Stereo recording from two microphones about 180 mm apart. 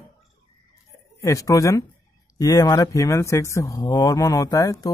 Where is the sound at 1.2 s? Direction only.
20° left (ahead or behind).